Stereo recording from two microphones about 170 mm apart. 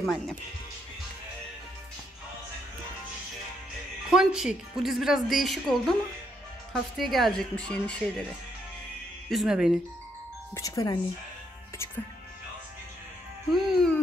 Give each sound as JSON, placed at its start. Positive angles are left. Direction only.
{"t": 0.0, "sound": "a woman's voice", "side_deg": 0}
{"t": 4.1, "sound": "a woman's voice", "side_deg": -5}
{"t": 9.3, "sound": "a woman's voice", "side_deg": 0}
{"t": 10.5, "sound": "speech", "side_deg": 20}
{"t": 13.5, "sound": "music", "side_deg": 0}